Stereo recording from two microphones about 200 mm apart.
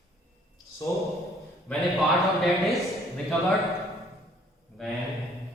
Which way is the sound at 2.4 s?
Centre (ahead or behind).